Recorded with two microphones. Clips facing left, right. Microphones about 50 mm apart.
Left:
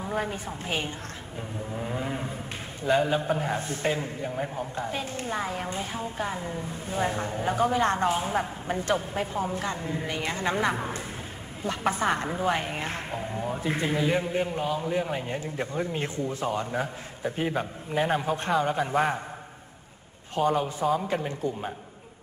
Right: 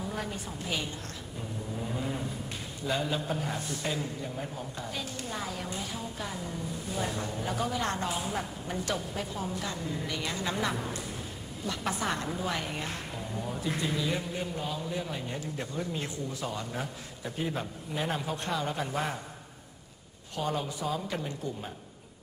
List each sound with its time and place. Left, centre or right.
0.0 s a man's voice: left
1.8 s vehicle: left
2.8 s a man's voice: left
20.4 s a man's voice: left